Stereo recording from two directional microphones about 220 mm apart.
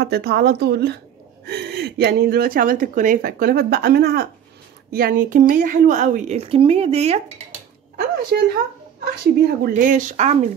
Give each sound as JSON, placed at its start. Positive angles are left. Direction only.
{"t": 0.0, "sound": "a woman's voice", "side_deg": -45}
{"t": 9.0, "sound": "a woman's voice", "side_deg": -40}